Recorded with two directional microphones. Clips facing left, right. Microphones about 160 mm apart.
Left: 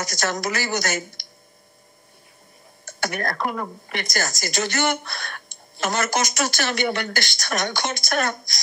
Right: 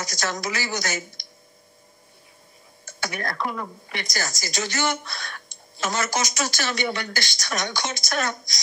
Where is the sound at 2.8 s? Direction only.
55° left (ahead or behind).